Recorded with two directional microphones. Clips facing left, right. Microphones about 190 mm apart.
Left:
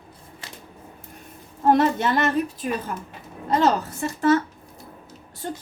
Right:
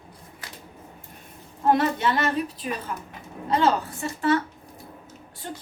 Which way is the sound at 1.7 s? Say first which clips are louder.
Left 3 dB; 45° left (ahead or behind).